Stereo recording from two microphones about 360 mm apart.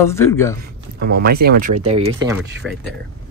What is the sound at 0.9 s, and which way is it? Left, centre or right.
Speech, right.